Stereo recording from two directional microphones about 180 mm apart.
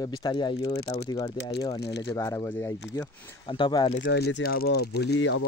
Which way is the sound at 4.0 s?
70° left (ahead or behind).